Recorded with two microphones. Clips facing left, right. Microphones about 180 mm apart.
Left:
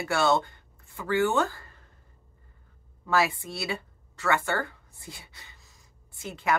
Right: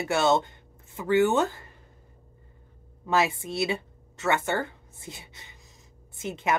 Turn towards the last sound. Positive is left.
turn(degrees=-20)  # may be behind; listen again after turning